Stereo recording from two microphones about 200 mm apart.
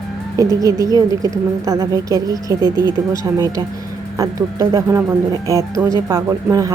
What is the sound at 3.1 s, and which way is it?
Speech, 15° right (ahead or behind).